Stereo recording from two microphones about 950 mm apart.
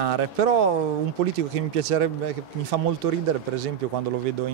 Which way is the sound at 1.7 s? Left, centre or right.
Right.